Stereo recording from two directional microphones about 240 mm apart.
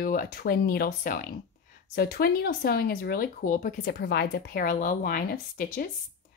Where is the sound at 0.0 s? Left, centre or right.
Left.